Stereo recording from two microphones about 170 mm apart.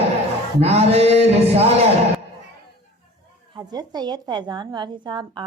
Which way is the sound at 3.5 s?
25° right (ahead or behind).